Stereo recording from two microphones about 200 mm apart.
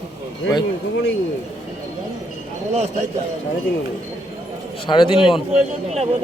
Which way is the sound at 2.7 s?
35° right (ahead or behind).